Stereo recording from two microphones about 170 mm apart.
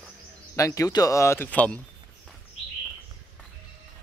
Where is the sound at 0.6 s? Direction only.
20° left (ahead or behind).